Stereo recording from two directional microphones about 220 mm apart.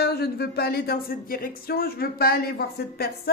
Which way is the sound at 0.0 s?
45° left (ahead or behind).